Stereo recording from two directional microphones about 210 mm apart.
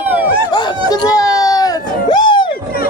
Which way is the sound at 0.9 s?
15° left (ahead or behind).